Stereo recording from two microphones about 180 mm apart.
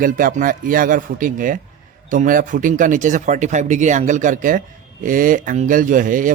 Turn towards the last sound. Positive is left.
turn(degrees=-45)  # may be behind; listen again after turning